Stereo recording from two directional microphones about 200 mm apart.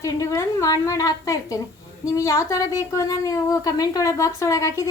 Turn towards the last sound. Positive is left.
turn(degrees=15)  # may be behind; listen again after turning